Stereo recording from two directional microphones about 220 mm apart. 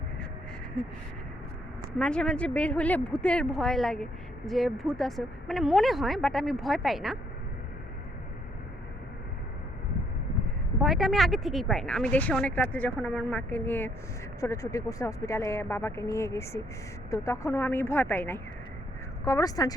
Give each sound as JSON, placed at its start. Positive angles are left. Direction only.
{"t": 2.0, "sound": "speech", "side_deg": 5}
{"t": 10.8, "sound": "speech", "side_deg": 0}